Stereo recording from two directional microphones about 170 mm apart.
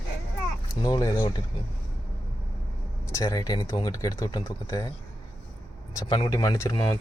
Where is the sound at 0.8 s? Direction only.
20° left (ahead or behind).